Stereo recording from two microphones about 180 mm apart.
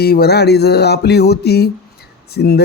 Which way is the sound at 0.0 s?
60° left (ahead or behind).